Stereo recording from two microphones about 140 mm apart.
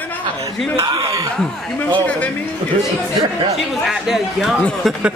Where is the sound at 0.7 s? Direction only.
30° right (ahead or behind).